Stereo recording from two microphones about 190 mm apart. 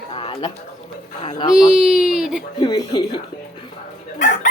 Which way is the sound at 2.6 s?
20° left (ahead or behind).